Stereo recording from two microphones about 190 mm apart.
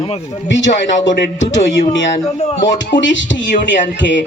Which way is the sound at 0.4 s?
75° left (ahead or behind).